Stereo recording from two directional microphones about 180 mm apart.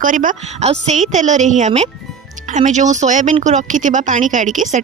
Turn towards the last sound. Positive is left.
turn(degrees=-45)  # may be behind; listen again after turning